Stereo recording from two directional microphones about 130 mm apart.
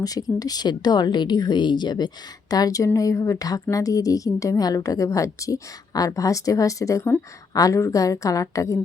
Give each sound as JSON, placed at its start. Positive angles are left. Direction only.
{"t": 0.0, "sound": "a woman's voice", "side_deg": 30}